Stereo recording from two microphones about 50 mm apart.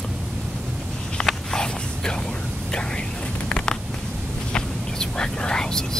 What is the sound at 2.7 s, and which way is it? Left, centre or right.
Whispering, centre.